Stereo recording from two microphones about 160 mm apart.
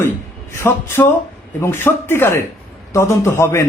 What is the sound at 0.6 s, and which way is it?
A man's voice, 15° left (ahead or behind).